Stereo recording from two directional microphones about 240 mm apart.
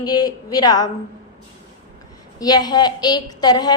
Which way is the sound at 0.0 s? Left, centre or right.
Centre.